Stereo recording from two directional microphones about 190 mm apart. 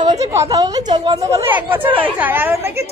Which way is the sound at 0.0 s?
20° right (ahead or behind).